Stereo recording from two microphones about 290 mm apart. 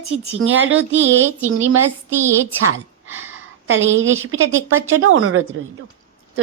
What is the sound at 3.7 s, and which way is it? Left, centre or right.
Speech, right.